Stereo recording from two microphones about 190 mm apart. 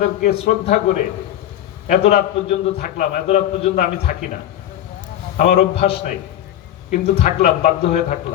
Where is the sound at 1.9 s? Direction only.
35° left (ahead or behind).